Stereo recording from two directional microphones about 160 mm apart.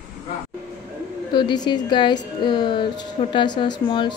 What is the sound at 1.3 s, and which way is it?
Speech, 30° left (ahead or behind).